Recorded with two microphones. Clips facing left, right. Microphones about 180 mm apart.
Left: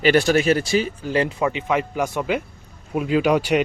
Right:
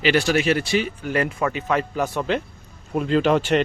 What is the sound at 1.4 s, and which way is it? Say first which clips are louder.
Speech: left 1 dB; 15° left (ahead or behind).